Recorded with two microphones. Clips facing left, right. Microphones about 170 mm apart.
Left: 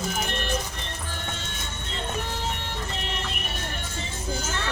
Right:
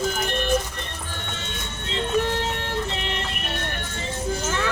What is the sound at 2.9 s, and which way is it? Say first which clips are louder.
Music: right 4 dB; 90° right.